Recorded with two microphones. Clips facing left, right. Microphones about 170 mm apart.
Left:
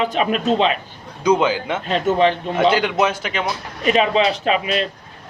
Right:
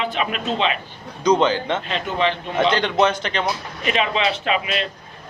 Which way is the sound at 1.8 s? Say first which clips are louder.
Left 6 dB; 45° left (ahead or behind).